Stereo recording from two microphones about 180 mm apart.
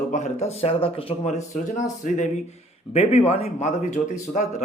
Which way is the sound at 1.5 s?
45° left (ahead or behind).